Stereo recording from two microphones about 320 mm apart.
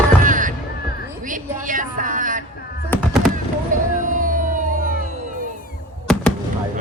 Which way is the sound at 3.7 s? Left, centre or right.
Right.